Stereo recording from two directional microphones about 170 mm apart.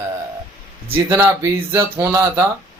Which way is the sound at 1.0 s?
15° right (ahead or behind).